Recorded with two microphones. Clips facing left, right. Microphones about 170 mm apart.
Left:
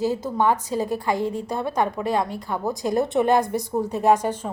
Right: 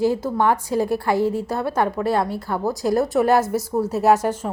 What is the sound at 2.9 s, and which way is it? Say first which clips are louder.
A woman's voice: right 1 dB; centre (ahead or behind).